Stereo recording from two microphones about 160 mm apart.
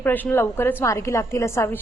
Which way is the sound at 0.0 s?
10° left (ahead or behind).